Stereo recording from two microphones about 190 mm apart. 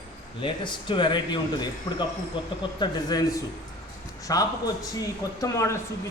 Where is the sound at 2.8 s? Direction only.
20° left (ahead or behind).